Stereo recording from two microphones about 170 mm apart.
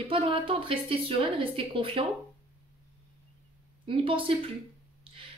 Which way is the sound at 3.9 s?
30° right (ahead or behind).